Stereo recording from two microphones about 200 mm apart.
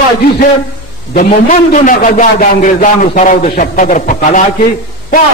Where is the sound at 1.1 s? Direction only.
40° left (ahead or behind).